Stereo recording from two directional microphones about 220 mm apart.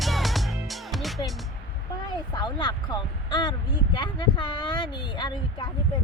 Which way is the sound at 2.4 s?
20° left (ahead or behind).